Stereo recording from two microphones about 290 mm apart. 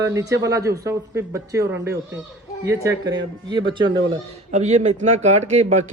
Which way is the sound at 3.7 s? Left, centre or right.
Centre.